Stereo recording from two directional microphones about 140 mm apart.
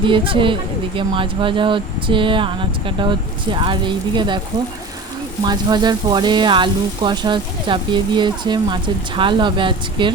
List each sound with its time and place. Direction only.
0.0 s speech: 35° right (ahead or behind)
5.5 s speech: 30° right (ahead or behind)